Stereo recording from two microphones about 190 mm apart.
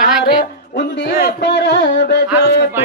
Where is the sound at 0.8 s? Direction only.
65° left (ahead or behind).